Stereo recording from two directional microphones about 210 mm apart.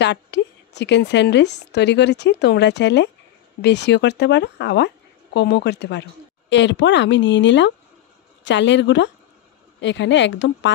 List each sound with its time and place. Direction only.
0.0 s a woman's voice: 55° left (ahead or behind)